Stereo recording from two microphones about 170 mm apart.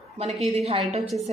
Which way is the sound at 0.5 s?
35° right (ahead or behind).